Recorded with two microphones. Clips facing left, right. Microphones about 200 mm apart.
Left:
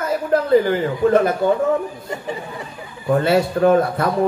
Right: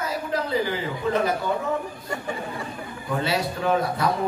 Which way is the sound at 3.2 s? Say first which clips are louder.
Left 9 dB; 50° left (ahead or behind).